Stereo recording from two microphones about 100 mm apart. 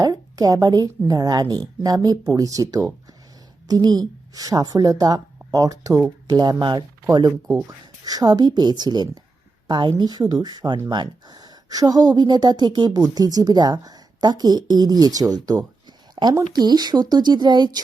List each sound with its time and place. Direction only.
0.0 s a woman's voice: 40° right (ahead or behind)
7.0 s a woman's voice: 35° right (ahead or behind)